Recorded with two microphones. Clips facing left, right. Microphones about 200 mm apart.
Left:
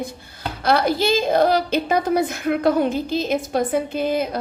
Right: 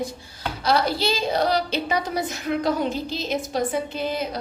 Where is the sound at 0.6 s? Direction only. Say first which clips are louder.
Left 4 dB; 55° left (ahead or behind).